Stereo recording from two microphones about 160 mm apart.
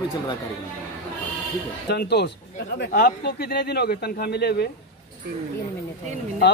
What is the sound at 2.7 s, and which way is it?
A man's voice, 75° left (ahead or behind).